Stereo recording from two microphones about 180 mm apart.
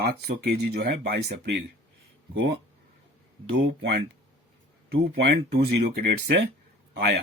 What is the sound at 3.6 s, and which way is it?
Speech, 85° right.